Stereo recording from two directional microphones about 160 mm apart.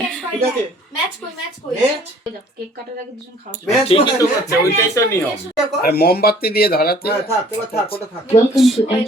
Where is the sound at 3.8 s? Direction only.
35° left (ahead or behind).